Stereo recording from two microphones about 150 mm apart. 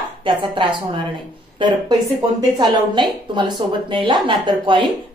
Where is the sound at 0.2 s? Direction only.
35° right (ahead or behind).